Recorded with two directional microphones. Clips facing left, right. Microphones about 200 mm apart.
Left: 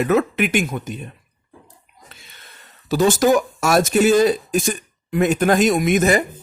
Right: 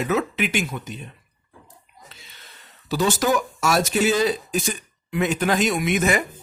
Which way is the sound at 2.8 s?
45° left (ahead or behind).